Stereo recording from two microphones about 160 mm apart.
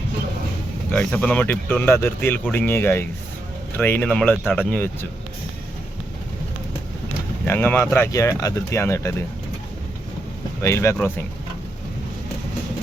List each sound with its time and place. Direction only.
0.9 s speech: 10° left (ahead or behind)
7.4 s speech: 15° left (ahead or behind)
10.6 s speech: 15° left (ahead or behind)